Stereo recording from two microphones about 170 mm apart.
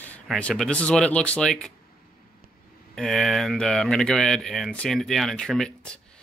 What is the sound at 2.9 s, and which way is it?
Speech, centre (ahead or behind).